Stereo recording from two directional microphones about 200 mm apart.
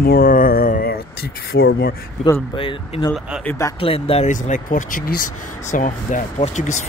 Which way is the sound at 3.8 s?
30° left (ahead or behind).